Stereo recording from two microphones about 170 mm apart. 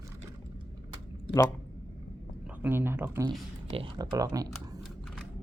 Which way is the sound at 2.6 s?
15° right (ahead or behind).